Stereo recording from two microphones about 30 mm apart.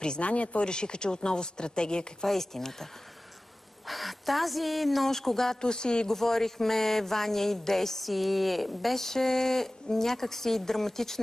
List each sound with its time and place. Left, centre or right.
0.2 s speech: left
0.7 s speech: left
2.2 s speech: centre
3.8 s speech: centre
5.0 s speech: centre
5.6 s speech: left
6.0 s speech: centre
8.0 s speech: centre
9.0 s speech: centre